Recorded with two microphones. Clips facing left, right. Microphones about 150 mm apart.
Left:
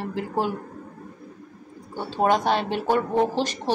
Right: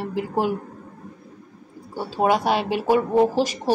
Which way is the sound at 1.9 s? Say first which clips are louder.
Right 1 dB; 10° right (ahead or behind).